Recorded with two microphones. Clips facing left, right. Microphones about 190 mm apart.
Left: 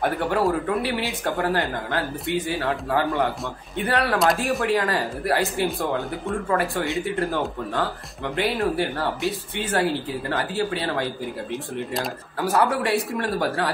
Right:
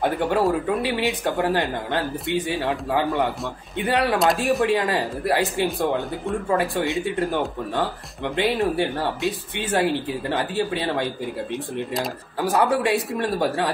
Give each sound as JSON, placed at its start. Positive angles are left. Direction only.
{"t": 0.0, "sound": "speech", "side_deg": -20}
{"t": 8.4, "sound": "speech", "side_deg": -20}
{"t": 12.4, "sound": "speech", "side_deg": -15}